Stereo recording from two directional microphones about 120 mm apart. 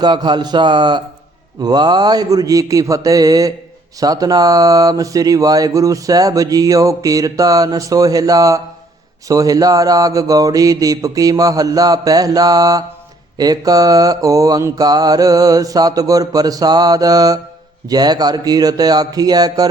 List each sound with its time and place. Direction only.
0.0 s mantra: 35° right (ahead or behind)
1.6 s speech: 35° right (ahead or behind)
9.2 s mantra: 30° right (ahead or behind)